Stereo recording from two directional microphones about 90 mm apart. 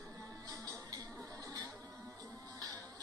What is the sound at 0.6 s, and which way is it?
Music, 45° right (ahead or behind).